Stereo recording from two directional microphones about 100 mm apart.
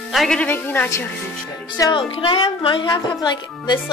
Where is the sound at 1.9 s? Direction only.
60° left (ahead or behind).